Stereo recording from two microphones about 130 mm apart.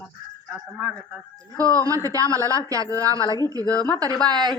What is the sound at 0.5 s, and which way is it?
Speech, 10° right (ahead or behind).